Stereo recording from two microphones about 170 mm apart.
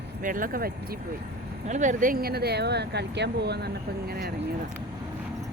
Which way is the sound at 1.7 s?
50° right (ahead or behind).